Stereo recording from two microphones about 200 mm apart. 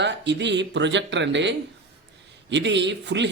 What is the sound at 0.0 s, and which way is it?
Speech, 60° right (ahead or behind).